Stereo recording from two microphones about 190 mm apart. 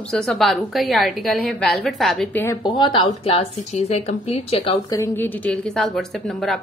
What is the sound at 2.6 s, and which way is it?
A woman's voice, 25° left (ahead or behind).